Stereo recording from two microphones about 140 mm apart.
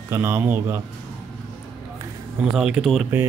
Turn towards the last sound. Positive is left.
turn(degrees=0)  # may be behind; listen again after turning